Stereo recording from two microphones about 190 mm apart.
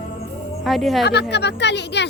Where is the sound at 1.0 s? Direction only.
60° left (ahead or behind).